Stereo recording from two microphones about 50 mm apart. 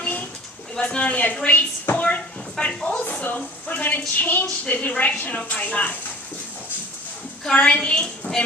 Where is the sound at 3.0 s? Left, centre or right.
Left.